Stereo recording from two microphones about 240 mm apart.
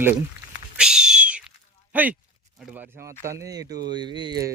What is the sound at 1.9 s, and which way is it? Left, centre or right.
Speech, centre.